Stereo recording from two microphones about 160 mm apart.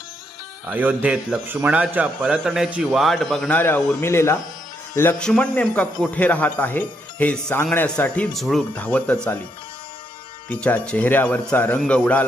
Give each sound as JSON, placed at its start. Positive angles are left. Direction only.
{"t": 0.7, "sound": "a man's voice", "side_deg": -10}
{"t": 10.5, "sound": "speech", "side_deg": 5}